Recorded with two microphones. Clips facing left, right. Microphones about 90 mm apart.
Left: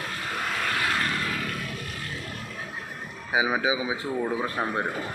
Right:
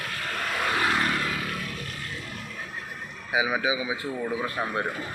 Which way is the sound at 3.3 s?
25° left (ahead or behind).